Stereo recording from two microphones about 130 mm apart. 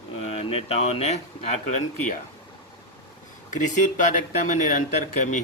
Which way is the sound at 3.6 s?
75° left (ahead or behind).